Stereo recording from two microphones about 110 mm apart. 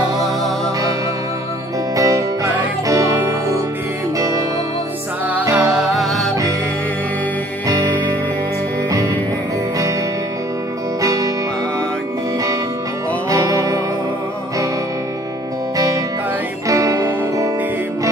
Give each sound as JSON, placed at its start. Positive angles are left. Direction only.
{"t": 2.0, "sound": "music", "side_deg": -30}
{"t": 5.5, "sound": "music", "side_deg": -10}
{"t": 11.0, "sound": "music", "side_deg": -30}
{"t": 13.3, "sound": "music", "side_deg": -30}
{"t": 16.6, "sound": "music", "side_deg": -30}